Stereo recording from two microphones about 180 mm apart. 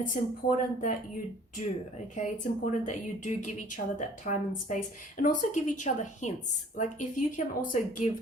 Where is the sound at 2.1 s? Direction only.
45° left (ahead or behind).